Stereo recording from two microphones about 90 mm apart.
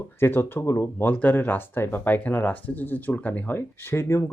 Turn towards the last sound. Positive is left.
turn(degrees=25)  # may be behind; listen again after turning